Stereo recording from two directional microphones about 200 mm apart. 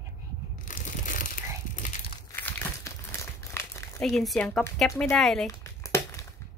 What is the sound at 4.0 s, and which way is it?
A woman's voice, centre (ahead or behind).